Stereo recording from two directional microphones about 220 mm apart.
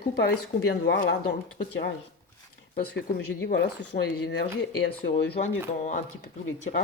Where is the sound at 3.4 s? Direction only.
50° left (ahead or behind).